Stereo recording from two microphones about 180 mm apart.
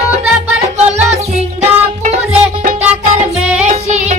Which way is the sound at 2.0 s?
35° right (ahead or behind).